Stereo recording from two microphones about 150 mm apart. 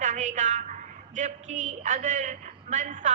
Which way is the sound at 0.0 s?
55° right (ahead or behind).